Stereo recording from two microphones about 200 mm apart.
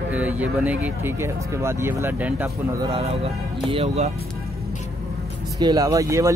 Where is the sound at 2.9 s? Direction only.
30° right (ahead or behind).